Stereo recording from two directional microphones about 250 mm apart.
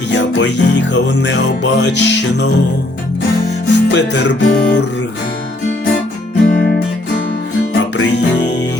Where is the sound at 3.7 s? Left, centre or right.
Left.